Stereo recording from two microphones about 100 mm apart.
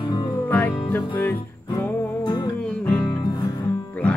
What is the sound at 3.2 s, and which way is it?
Music, 45° left (ahead or behind).